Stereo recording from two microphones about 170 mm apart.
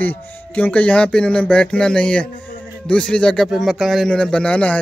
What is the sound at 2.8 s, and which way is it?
Speech, 5° left (ahead or behind).